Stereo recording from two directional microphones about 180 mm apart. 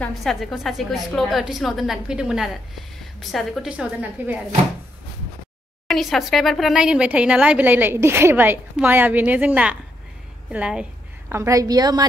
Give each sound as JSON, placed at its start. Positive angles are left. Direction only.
{"t": 0.0, "sound": "a woman's voice", "side_deg": 0}
{"t": 5.9, "sound": "a woman's voice", "side_deg": 0}